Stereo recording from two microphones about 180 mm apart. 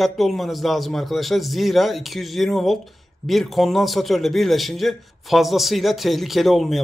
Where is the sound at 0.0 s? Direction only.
Centre (ahead or behind).